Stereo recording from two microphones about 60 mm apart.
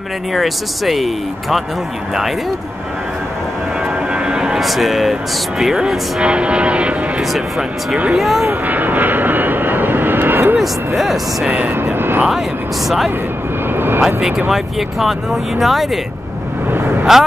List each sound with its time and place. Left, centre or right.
0.3 s speech: centre
4.1 s vehicle: centre
4.6 s speech: centre
7.3 s speech: centre
8.6 s vehicle: right
11.0 s speech: centre
11.7 s vehicle: right
12.3 s speech: centre
13.7 s aircraft: right
14.0 s speech: centre
17.1 s speech: centre